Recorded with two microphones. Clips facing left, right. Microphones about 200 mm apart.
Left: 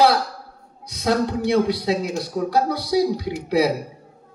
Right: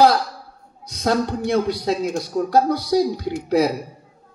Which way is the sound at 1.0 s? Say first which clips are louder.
Even; 45° right (ahead or behind).